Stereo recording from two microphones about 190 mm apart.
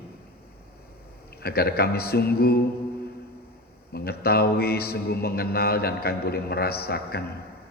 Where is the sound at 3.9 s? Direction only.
55° left (ahead or behind).